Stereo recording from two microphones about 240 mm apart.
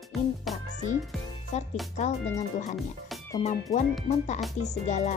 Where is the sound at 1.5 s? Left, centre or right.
Left.